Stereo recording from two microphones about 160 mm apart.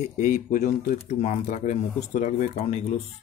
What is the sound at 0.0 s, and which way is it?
Speech, 50° left (ahead or behind).